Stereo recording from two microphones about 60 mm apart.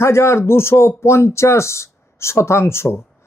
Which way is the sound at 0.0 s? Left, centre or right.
Left.